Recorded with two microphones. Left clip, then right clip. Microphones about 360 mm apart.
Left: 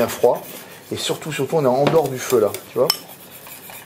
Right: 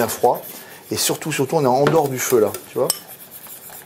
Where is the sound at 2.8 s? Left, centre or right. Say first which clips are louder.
Left 3 dB; centre.